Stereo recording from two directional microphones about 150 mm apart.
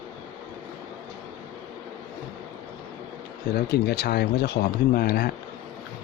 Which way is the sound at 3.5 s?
90° left.